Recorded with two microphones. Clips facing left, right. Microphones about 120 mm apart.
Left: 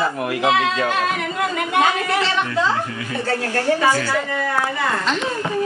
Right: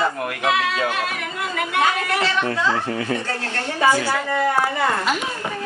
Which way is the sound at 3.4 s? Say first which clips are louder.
Left 1 dB; 20° right (ahead or behind).